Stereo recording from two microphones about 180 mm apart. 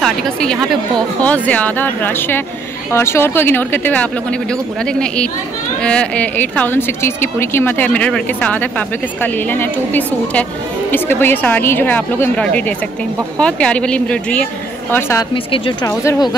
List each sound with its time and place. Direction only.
0.0 s a woman's voice: 5° left (ahead or behind)
15.3 s a woman's voice: 30° left (ahead or behind)
15.9 s speech: 15° left (ahead or behind)